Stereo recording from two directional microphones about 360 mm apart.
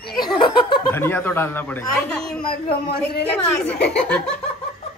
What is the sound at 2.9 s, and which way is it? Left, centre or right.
Speech, left.